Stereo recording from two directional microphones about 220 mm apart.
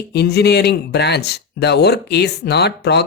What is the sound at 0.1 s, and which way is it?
Speech, 50° left (ahead or behind).